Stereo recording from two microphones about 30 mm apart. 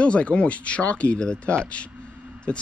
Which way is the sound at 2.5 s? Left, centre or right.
Left.